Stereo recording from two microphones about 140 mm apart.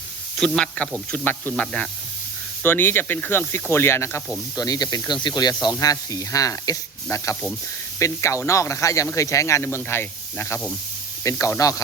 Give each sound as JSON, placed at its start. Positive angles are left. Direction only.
{"t": 0.3, "sound": "speech", "side_deg": 5}